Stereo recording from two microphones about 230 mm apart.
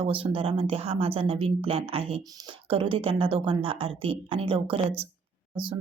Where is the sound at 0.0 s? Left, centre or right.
Right.